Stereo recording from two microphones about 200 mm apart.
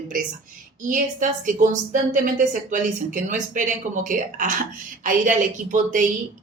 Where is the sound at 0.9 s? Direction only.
40° right (ahead or behind).